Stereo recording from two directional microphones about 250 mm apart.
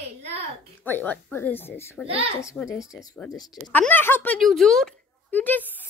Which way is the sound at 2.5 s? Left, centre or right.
Centre.